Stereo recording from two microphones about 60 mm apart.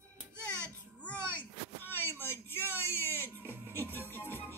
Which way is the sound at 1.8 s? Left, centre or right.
Left.